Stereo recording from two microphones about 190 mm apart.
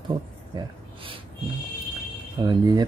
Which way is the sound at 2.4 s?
25° right (ahead or behind).